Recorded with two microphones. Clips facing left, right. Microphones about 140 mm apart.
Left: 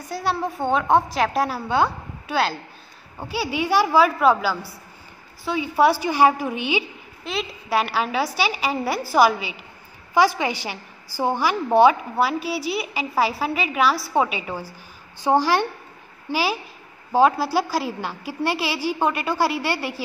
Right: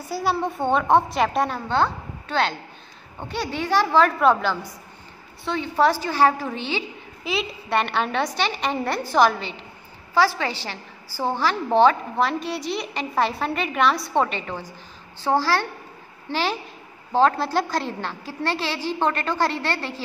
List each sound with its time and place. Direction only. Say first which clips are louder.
0.1 s a woman's voice: right 1 dB; centre (ahead or behind)
7.2 s a woman's voice: right 1 dB; centre (ahead or behind)